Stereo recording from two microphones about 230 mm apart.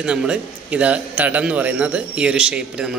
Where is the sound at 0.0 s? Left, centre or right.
Centre.